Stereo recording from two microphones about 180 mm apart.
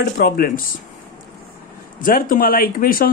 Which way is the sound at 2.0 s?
50° left (ahead or behind).